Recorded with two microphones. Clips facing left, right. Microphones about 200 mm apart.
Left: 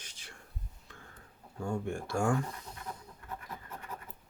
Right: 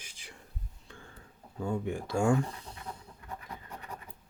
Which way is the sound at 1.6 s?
20° right (ahead or behind).